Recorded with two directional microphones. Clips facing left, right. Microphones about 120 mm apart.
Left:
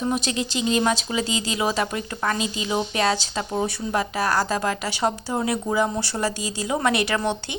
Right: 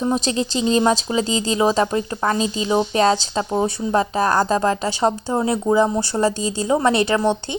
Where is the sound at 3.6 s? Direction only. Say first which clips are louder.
Right 5 dB; 30° right (ahead or behind).